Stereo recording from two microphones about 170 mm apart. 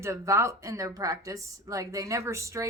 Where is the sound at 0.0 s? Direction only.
15° right (ahead or behind).